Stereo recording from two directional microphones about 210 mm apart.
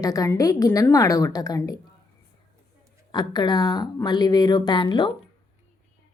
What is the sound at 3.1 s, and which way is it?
A woman's voice, 20° left (ahead or behind).